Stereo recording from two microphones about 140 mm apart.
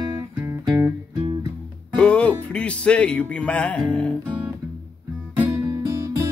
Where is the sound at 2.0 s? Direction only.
10° left (ahead or behind).